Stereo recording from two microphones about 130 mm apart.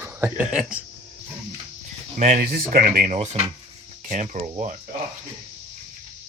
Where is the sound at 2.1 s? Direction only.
75° right (ahead or behind).